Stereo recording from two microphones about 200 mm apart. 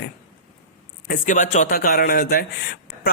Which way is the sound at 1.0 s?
40° left (ahead or behind).